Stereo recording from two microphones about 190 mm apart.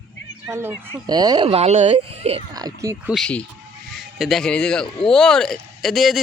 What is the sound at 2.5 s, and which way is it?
Speech, 20° right (ahead or behind).